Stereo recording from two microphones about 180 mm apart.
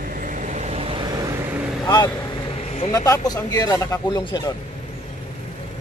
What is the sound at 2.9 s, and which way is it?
Speech, 20° left (ahead or behind).